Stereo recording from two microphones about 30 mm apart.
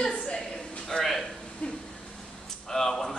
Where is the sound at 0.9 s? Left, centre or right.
Centre.